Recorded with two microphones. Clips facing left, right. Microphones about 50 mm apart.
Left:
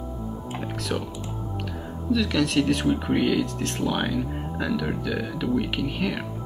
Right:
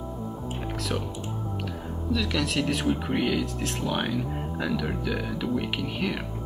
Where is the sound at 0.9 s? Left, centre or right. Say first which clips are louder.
Left 3 dB; centre.